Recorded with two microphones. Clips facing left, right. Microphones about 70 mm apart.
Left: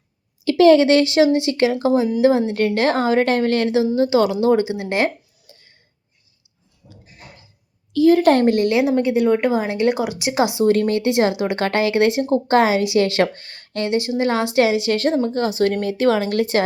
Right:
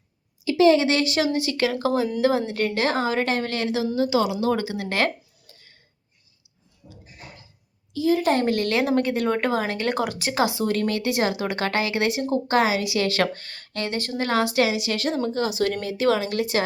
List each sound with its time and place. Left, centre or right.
0.5 s speech: left
2.5 s speech: left
3.8 s speech: left
7.9 s a woman's voice: left
8.4 s speech: left
8.7 s speech: centre
10.6 s speech: left